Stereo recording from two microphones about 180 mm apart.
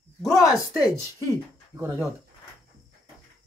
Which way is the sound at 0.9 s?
15° right (ahead or behind).